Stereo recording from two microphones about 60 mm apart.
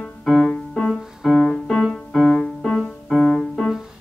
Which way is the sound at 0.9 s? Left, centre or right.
Centre.